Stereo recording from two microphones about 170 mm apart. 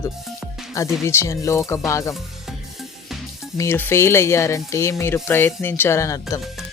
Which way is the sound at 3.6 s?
10° left (ahead or behind).